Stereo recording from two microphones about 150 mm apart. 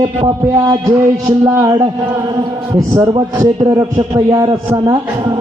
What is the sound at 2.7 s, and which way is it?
A man's voice, 25° right (ahead or behind).